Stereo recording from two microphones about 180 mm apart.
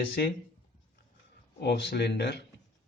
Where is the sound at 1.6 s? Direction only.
65° left (ahead or behind).